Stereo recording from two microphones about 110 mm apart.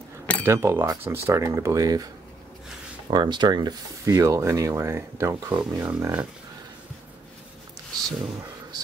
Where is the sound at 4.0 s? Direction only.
30° right (ahead or behind).